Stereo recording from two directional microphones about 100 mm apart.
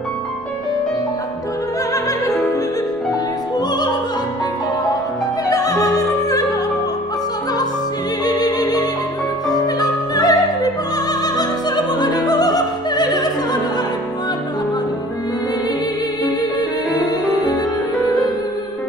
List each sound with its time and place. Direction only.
3.5 s music: 45° left (ahead or behind)
5.5 s music: 35° left (ahead or behind)
8.3 s music: 40° left (ahead or behind)
9.8 s opera: 40° left (ahead or behind)
11.2 s music: 45° left (ahead or behind)